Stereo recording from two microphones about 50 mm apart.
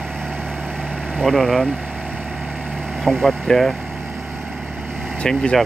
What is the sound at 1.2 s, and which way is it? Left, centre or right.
Speech, centre.